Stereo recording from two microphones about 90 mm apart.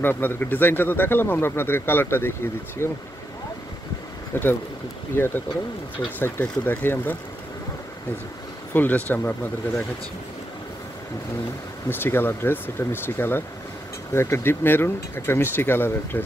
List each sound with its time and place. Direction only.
0.0 s speech: 20° left (ahead or behind)
4.3 s speech: 20° left (ahead or behind)
8.7 s speech: 20° left (ahead or behind)
11.9 s speech: 25° left (ahead or behind)